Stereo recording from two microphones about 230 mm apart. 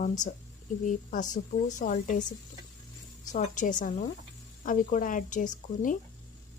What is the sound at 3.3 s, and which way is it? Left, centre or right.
A woman's voice, left.